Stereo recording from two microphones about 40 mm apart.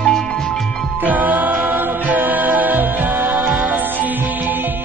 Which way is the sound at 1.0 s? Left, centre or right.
Right.